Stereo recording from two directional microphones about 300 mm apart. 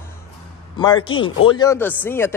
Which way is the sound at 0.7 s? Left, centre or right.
Centre.